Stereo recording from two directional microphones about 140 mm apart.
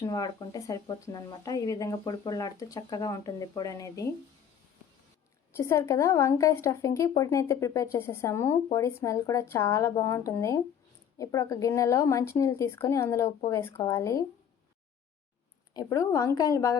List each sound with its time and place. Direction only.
0.0 s a woman's voice: 25° left (ahead or behind)
5.5 s a woman's voice: 20° left (ahead or behind)
15.7 s a woman's voice: 20° left (ahead or behind)